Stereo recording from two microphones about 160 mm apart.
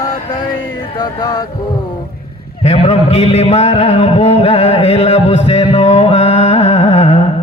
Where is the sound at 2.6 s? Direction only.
40° left (ahead or behind).